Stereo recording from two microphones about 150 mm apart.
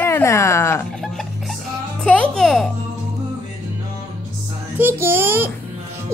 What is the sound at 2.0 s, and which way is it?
Speech, 5° left (ahead or behind).